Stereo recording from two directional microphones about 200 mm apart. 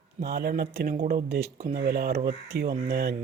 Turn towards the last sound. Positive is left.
turn(degrees=-55)  # may be behind; listen again after turning